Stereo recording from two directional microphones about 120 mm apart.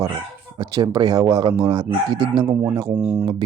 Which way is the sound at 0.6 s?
35° right (ahead or behind).